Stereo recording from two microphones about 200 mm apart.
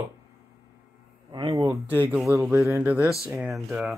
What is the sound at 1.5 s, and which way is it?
Speech, 15° right (ahead or behind).